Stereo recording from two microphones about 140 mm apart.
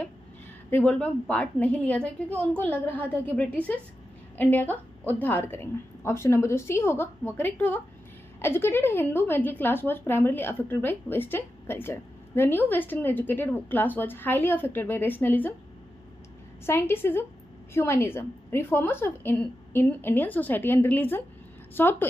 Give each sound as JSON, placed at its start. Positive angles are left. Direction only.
{"t": 0.7, "sound": "a woman's voice", "side_deg": 10}
{"t": 16.6, "sound": "a woman's voice", "side_deg": 15}